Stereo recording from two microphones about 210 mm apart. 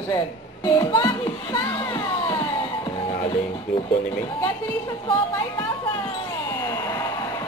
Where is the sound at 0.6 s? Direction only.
15° left (ahead or behind).